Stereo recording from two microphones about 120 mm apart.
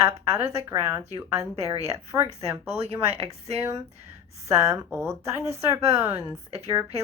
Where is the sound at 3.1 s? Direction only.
55° right (ahead or behind).